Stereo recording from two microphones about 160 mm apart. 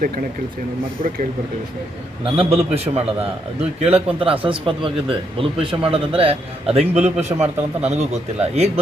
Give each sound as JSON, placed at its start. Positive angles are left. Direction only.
{"t": 2.3, "sound": "a man's voice", "side_deg": -35}
{"t": 7.3, "sound": "a man's voice", "side_deg": -25}
{"t": 7.9, "sound": "a man's voice", "side_deg": -45}